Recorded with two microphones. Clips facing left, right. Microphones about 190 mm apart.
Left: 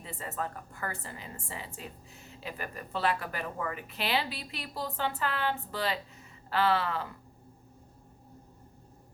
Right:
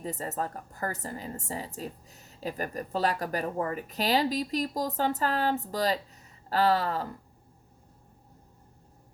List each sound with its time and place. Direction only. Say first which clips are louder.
0.0 s a woman's voice: right 4 dB; 40° right (ahead or behind)